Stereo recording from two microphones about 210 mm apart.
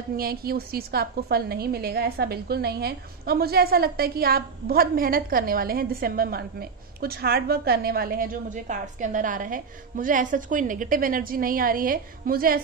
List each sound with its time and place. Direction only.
0.2 s a woman's voice: 45° right (ahead or behind)